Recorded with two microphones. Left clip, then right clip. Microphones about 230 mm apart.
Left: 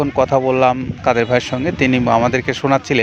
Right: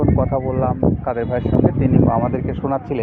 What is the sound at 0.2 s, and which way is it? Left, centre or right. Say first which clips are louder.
Speech: left 7 dB; left.